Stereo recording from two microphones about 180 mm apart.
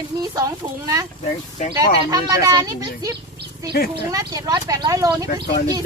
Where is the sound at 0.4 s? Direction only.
15° right (ahead or behind).